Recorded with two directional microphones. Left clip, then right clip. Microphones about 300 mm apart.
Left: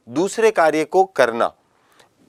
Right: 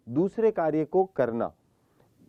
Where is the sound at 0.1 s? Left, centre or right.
Centre.